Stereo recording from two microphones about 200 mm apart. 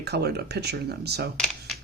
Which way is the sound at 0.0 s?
55° right (ahead or behind).